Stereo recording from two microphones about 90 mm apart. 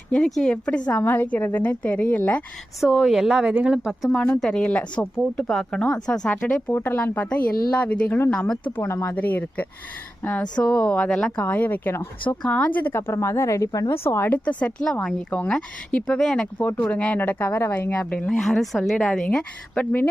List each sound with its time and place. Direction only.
0.1 s speech: 5° left (ahead or behind)
2.9 s speech: 5° right (ahead or behind)
4.1 s speech: 10° left (ahead or behind)
8.8 s speech: 30° left (ahead or behind)
12.4 s speech: 10° left (ahead or behind)
16.6 s speech: 20° left (ahead or behind)